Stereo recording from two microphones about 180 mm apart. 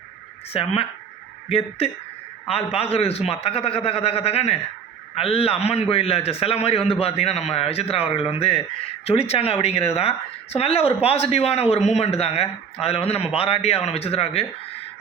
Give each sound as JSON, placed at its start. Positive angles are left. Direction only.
{"t": 0.5, "sound": "a woman's voice", "side_deg": 30}